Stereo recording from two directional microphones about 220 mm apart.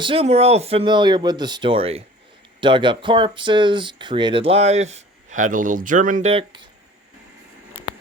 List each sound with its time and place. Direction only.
0.0 s speech: 25° right (ahead or behind)